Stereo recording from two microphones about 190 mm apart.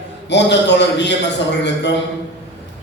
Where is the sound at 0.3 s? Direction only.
65° left (ahead or behind).